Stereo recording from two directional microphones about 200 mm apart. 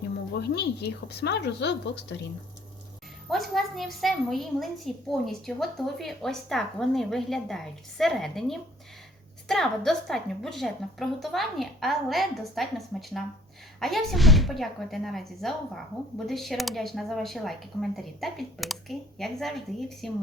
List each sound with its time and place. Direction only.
0.3 s a woman's voice: 55° left (ahead or behind)
3.2 s speech: centre (ahead or behind)